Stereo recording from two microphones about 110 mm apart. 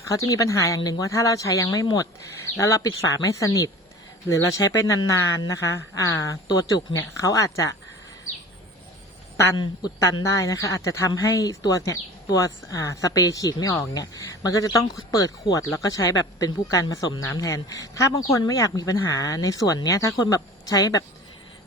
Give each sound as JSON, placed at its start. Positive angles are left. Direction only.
{"t": 0.1, "sound": "speech", "side_deg": 30}
{"t": 10.4, "sound": "speech", "side_deg": 30}